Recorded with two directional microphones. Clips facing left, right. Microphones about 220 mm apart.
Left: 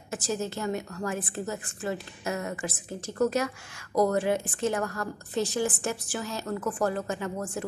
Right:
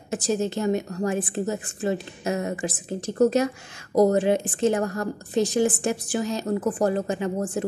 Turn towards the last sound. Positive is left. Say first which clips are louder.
# right 5 dB
turn(degrees=-20)  # may be behind; listen again after turning